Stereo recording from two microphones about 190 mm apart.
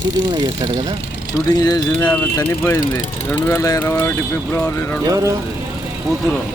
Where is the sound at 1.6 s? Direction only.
20° left (ahead or behind).